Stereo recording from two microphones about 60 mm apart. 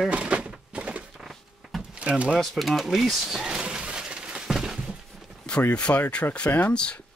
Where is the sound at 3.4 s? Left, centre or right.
Centre.